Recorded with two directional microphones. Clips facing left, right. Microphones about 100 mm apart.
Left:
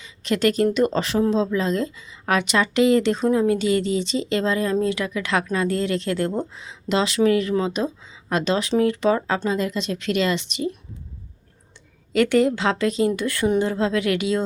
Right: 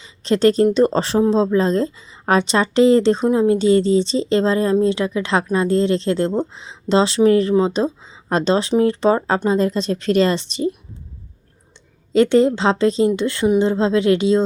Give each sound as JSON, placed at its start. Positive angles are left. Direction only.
{"t": 0.0, "sound": "speech", "side_deg": -30}
{"t": 12.1, "sound": "speech", "side_deg": -25}